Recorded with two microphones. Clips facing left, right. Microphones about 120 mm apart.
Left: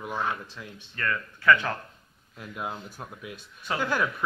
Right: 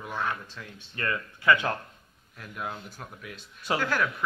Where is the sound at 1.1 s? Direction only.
20° right (ahead or behind).